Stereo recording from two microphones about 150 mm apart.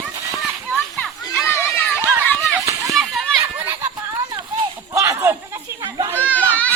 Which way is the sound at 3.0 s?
Centre (ahead or behind).